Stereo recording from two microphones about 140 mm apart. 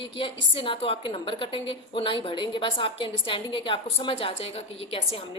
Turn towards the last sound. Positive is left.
turn(degrees=45)  # may be behind; listen again after turning